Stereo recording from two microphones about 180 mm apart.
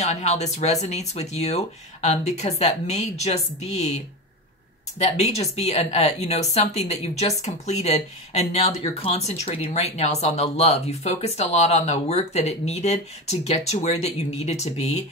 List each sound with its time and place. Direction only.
0.0 s speech: 40° left (ahead or behind)
4.9 s speech: 40° left (ahead or behind)